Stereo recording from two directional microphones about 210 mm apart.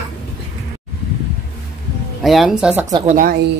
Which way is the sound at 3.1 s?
40° right (ahead or behind).